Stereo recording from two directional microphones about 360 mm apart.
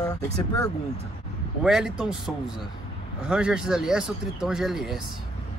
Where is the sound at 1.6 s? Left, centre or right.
Centre.